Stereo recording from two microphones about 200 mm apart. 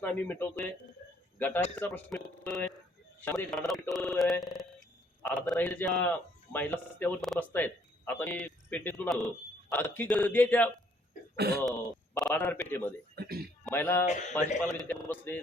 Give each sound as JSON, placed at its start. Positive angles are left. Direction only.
{"t": 0.0, "sound": "a man's voice", "side_deg": 10}
{"t": 11.3, "sound": "throat clearing", "side_deg": -55}
{"t": 12.1, "sound": "speech", "side_deg": 5}
{"t": 13.1, "sound": "a man's voice", "side_deg": -50}
{"t": 13.7, "sound": "speech", "side_deg": 10}